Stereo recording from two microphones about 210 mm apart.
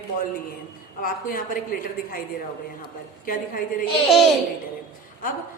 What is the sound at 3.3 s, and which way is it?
Speech, 40° left (ahead or behind).